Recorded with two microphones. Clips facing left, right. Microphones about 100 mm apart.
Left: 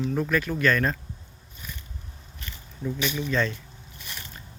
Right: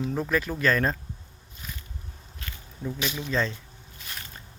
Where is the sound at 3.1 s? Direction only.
20° right (ahead or behind).